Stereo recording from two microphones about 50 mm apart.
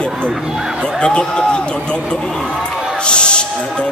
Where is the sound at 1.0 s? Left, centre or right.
Centre.